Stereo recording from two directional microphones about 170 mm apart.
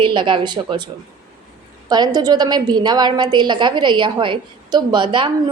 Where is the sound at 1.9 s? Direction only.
25° right (ahead or behind).